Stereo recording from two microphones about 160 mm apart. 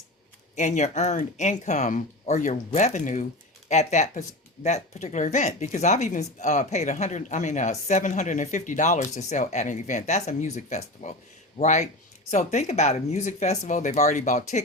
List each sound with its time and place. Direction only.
0.5 s speech: 50° left (ahead or behind)